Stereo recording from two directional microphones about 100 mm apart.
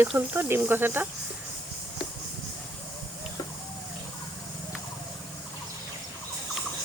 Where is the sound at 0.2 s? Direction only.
20° right (ahead or behind).